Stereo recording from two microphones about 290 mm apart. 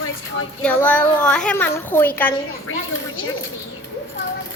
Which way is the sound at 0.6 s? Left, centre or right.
Centre.